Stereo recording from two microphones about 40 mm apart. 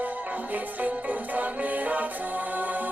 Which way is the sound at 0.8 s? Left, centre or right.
Right.